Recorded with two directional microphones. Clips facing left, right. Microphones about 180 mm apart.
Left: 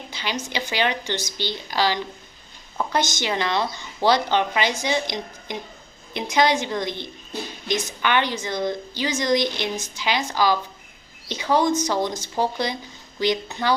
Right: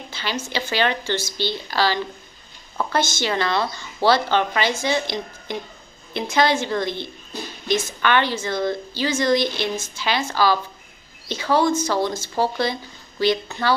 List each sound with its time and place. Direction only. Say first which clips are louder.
0.1 s a woman's voice: right 2 dB; 15° left (ahead or behind)